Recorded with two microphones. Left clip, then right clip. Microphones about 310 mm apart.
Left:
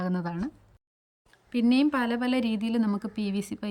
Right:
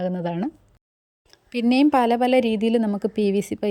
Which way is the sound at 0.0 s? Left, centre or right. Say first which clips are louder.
Right 7 dB; centre.